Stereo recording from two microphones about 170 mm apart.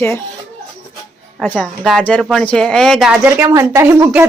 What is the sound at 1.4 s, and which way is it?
A woman's voice, 10° left (ahead or behind).